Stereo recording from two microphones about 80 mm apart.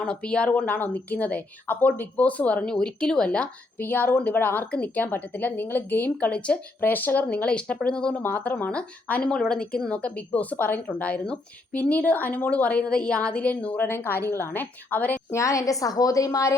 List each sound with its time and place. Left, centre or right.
0.0 s speech: centre
8.2 s speech: left
15.3 s a woman's voice: left